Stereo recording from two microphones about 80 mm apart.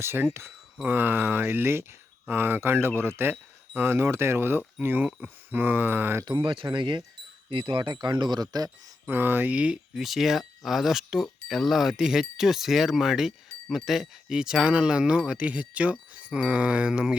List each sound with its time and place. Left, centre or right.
0.0 s speech: right
6.2 s speech: right
6.7 s speech: right
7.5 s speech: right
8.0 s speech: right
9.0 s speech: right
9.9 s speech: centre